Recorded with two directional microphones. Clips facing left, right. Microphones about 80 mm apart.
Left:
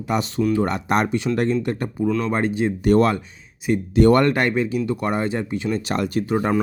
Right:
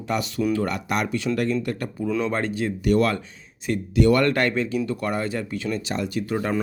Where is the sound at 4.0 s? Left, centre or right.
Left.